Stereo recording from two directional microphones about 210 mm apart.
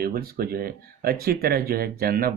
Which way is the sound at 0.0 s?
45° right (ahead or behind).